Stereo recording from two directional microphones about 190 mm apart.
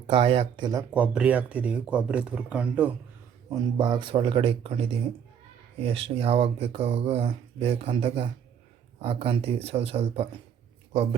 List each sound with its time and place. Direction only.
0.1 s speech: 30° right (ahead or behind)
0.9 s speech: 5° right (ahead or behind)
3.5 s speech: 25° right (ahead or behind)
5.8 s speech: 30° right (ahead or behind)